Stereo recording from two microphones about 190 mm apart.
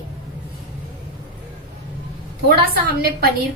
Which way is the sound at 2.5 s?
55° right (ahead or behind).